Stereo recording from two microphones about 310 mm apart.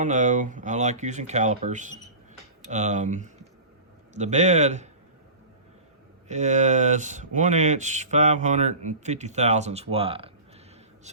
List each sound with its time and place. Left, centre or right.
0.0 s speech: right
6.2 s speech: right